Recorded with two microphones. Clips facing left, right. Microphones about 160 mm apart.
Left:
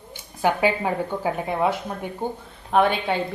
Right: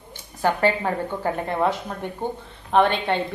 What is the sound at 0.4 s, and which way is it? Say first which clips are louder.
A woman's voice: even; 10° left (ahead or behind).